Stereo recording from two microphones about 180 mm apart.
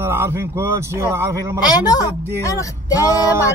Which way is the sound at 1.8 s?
20° left (ahead or behind).